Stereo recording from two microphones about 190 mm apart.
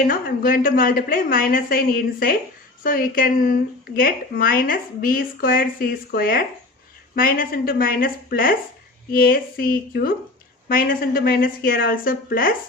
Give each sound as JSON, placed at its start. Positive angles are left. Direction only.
{"t": 0.0, "sound": "speech", "side_deg": 50}